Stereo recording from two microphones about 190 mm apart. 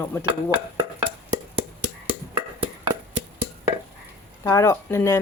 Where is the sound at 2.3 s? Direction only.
25° right (ahead or behind).